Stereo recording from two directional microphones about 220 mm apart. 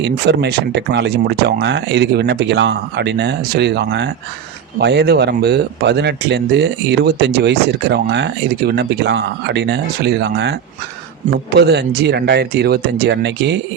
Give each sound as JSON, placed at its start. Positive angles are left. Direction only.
{"t": 0.0, "sound": "speech", "side_deg": -50}